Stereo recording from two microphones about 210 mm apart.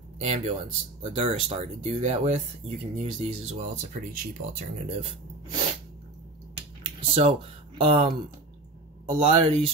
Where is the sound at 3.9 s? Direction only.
40° right (ahead or behind).